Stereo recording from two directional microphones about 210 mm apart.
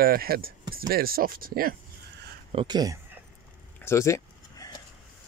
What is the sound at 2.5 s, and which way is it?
Speech, 25° right (ahead or behind).